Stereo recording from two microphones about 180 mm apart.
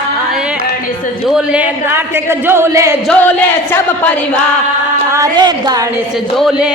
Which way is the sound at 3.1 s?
10° left (ahead or behind).